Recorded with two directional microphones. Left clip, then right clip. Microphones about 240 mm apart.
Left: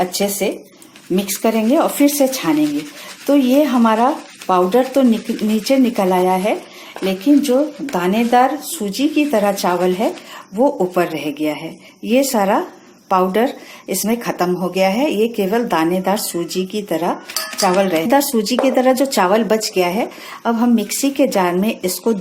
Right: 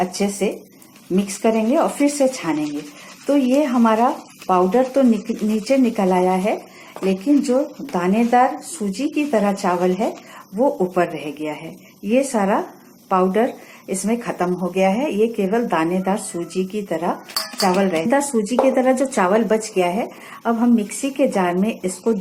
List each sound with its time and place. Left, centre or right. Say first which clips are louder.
0.0 s speech: left 3 dB; left